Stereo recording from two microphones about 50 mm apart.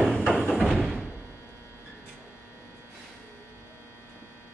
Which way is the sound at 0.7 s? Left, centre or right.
Centre.